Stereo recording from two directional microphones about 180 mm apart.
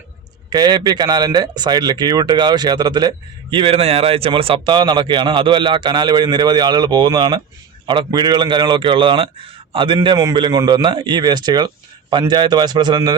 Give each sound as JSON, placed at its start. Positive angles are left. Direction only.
{"t": 0.5, "sound": "speech", "side_deg": -20}